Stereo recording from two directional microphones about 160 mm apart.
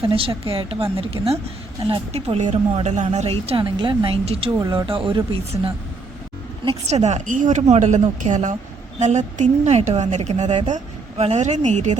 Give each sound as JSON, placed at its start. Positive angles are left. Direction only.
{"t": 0.1, "sound": "a woman's voice", "side_deg": -35}
{"t": 4.6, "sound": "speech", "side_deg": -20}
{"t": 4.9, "sound": "a woman's voice", "side_deg": -35}
{"t": 6.8, "sound": "speech", "side_deg": -45}